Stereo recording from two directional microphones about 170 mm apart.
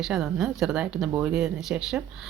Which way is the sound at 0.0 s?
Centre (ahead or behind).